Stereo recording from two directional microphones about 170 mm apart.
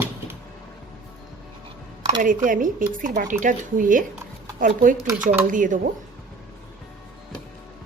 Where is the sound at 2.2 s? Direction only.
55° right (ahead or behind).